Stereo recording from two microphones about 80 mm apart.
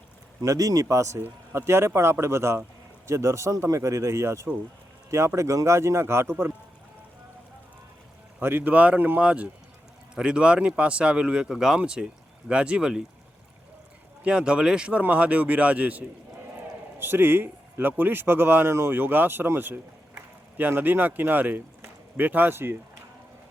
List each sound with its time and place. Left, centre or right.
0.4 s speech: right
8.4 s speech: right
14.3 s speech: centre